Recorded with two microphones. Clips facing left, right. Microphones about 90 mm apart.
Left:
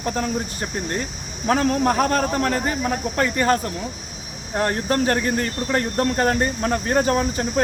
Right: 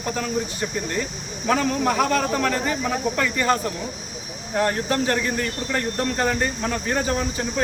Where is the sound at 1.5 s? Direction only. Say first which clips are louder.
Left 2 dB; 40° left (ahead or behind).